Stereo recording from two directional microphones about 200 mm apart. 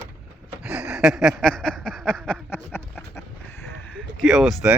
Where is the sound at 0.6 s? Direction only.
5° right (ahead or behind).